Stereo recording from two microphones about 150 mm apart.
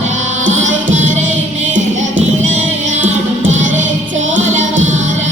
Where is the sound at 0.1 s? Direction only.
55° right (ahead or behind).